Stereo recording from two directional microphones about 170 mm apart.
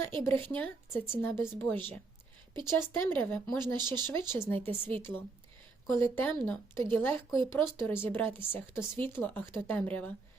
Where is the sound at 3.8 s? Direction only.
25° right (ahead or behind).